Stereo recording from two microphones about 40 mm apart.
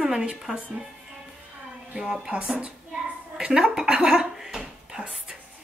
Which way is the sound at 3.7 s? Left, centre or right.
Centre.